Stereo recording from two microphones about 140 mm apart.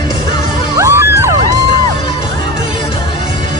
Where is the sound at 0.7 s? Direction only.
20° right (ahead or behind).